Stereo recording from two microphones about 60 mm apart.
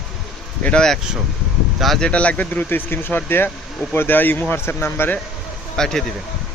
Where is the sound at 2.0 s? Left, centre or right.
Centre; by 5.1 s left.